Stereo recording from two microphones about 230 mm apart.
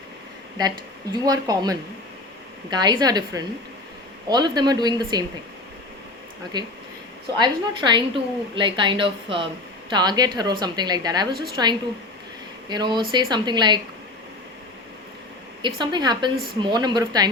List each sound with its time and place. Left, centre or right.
1.2 s a woman's voice: centre
6.5 s a woman's voice: centre
15.6 s a woman's voice: centre